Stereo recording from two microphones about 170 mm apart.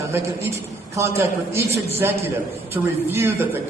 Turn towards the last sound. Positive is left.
turn(degrees=-15)  # may be behind; listen again after turning